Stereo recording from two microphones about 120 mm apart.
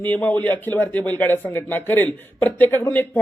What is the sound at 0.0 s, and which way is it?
A man's voice, 15° left (ahead or behind).